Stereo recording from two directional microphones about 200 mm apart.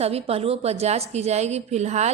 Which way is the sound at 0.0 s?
30° right (ahead or behind).